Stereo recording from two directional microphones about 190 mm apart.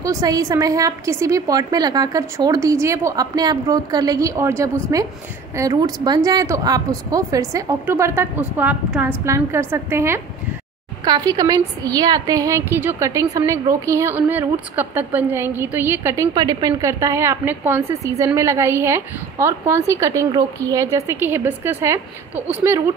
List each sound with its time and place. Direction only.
0.0 s a woman's voice: 20° right (ahead or behind)